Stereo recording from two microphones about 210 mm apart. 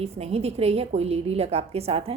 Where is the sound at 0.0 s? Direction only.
30° right (ahead or behind).